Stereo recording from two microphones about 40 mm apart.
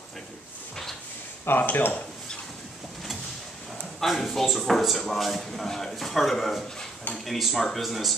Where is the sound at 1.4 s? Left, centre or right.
Left.